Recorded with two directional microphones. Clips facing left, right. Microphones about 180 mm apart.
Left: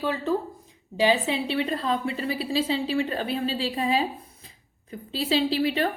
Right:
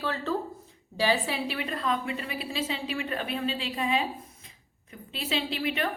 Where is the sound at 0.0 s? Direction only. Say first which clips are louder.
Left 4 dB; 15° left (ahead or behind); by 5.9 s 35° left (ahead or behind).